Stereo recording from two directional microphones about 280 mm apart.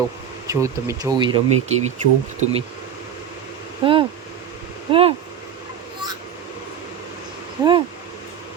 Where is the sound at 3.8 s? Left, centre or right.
Centre.